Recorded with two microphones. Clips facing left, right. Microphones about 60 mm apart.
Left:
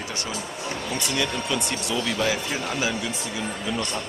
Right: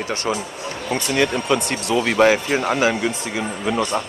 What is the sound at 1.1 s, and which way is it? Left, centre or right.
Speech, right.